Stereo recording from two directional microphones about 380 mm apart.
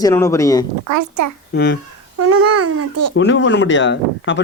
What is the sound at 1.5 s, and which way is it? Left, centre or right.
Speech, left.